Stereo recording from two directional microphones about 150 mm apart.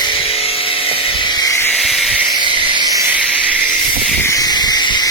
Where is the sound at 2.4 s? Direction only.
35° right (ahead or behind).